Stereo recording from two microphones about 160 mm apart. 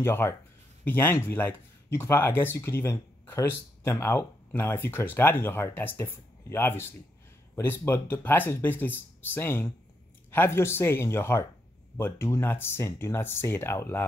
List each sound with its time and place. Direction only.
0.0 s speech: 15° left (ahead or behind)